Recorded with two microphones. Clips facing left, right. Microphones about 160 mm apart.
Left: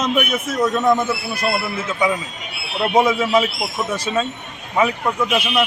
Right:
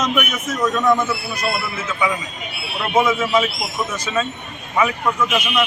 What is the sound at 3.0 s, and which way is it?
Speech, 35° left (ahead or behind).